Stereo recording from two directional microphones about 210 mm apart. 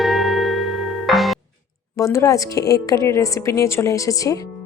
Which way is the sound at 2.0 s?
15° left (ahead or behind).